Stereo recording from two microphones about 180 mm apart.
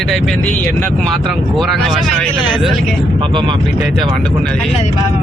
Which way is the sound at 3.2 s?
30° right (ahead or behind).